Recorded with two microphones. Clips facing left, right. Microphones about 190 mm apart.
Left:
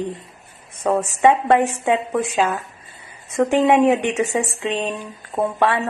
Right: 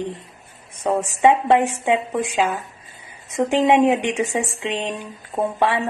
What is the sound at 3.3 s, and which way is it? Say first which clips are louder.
Speech: left 1 dB; 15° right (ahead or behind).